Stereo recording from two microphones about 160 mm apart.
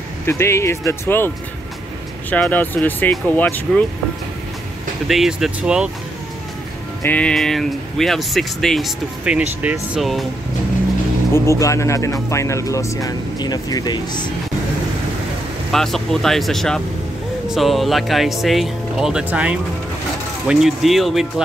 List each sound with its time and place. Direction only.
0.3 s speech: 15° left (ahead or behind)
2.3 s speech: 10° left (ahead or behind)
5.0 s speech: centre (ahead or behind)
7.0 s speech: 10° left (ahead or behind)
11.3 s speech: 20° left (ahead or behind)
15.7 s speech: centre (ahead or behind)